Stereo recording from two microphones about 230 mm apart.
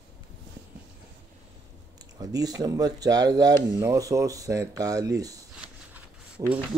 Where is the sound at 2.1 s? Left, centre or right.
Centre.